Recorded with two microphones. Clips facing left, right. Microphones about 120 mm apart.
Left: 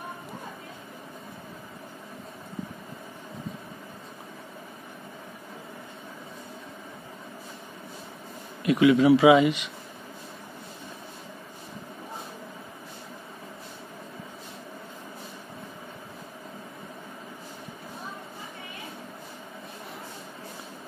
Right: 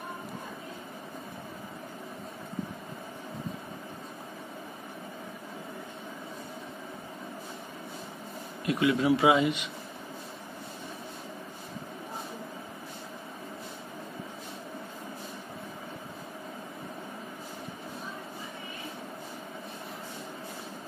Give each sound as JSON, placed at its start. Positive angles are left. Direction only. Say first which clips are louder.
{"t": 8.6, "sound": "speech", "louder": "left 7 dB", "side_deg": 90}